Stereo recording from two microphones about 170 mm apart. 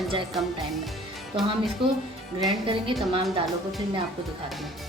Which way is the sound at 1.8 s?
30° right (ahead or behind).